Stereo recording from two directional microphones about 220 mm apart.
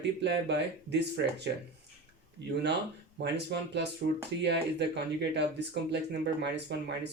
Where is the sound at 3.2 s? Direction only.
50° right (ahead or behind).